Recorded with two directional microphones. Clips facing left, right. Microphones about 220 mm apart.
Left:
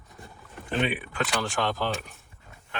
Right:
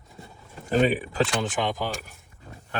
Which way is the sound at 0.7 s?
40° right (ahead or behind).